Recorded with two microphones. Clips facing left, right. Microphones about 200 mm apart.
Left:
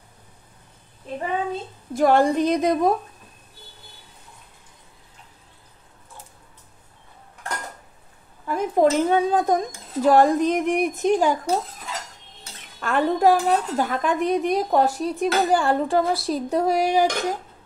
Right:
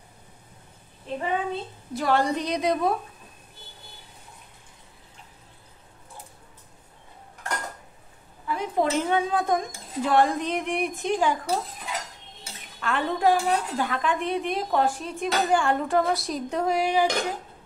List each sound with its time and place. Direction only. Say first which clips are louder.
1.5 s speech: left 2 dB; 50° left (ahead or behind)
8.5 s speech: left 6 dB; 45° left (ahead or behind)
12.8 s speech: left 5 dB; 45° left (ahead or behind)